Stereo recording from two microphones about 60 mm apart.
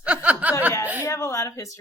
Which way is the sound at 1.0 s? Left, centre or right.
Left.